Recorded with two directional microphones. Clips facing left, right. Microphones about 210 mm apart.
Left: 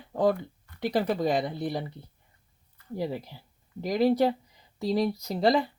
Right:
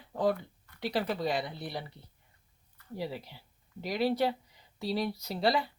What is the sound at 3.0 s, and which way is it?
Speech, 45° left (ahead or behind).